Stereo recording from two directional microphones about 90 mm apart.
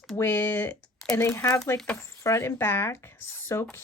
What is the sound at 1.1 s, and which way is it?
Speech, 30° left (ahead or behind).